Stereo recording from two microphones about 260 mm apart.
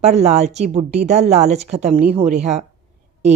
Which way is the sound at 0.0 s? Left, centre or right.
Right.